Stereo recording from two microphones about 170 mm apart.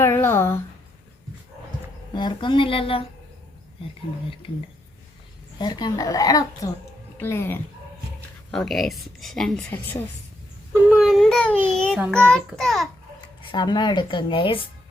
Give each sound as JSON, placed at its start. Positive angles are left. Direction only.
{"t": 0.0, "sound": "speech", "side_deg": 15}
{"t": 2.1, "sound": "speech", "side_deg": 25}
{"t": 5.5, "sound": "speech", "side_deg": 25}
{"t": 8.4, "sound": "a child's voice", "side_deg": 0}
{"t": 10.8, "sound": "a child's voice", "side_deg": 0}
{"t": 13.5, "sound": "speech", "side_deg": 25}